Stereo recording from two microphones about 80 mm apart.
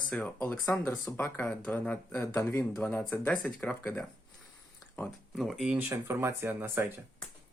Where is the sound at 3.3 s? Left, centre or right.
Centre.